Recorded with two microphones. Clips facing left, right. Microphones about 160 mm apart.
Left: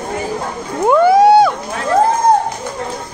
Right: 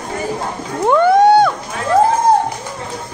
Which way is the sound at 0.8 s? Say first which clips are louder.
Left 1 dB; 5° left (ahead or behind).